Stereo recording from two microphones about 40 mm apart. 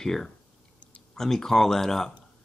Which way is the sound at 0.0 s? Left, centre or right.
Centre.